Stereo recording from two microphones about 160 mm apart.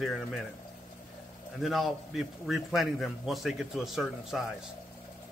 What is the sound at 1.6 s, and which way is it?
Speech, centre (ahead or behind).